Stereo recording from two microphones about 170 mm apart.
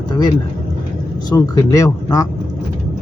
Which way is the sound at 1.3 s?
20° left (ahead or behind).